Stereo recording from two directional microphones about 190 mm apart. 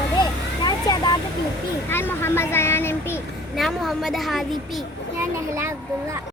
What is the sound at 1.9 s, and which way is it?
Speech, 10° left (ahead or behind).